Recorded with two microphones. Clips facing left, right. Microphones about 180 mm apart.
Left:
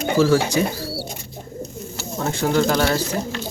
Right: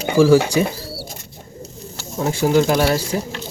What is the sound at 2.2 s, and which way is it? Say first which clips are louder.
Speech: right 3 dB; 10° right (ahead or behind).